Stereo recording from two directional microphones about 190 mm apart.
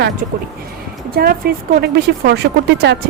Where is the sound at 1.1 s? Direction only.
50° right (ahead or behind).